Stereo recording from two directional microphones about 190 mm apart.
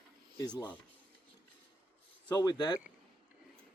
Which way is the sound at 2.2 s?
20° left (ahead or behind).